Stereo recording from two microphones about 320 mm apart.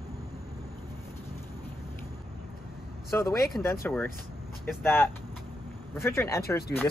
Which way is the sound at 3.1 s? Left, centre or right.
Centre.